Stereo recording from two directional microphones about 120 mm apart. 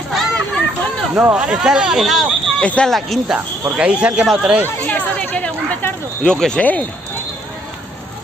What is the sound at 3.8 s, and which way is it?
Speech, 10° right (ahead or behind).